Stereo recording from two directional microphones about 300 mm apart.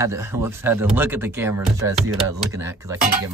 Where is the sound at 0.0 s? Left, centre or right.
Centre.